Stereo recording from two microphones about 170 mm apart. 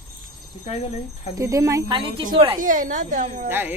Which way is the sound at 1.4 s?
20° right (ahead or behind).